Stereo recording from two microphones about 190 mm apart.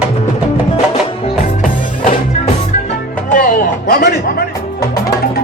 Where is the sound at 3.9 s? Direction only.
50° left (ahead or behind).